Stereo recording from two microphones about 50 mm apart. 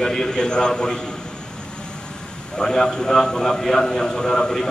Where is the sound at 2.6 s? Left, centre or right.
Centre.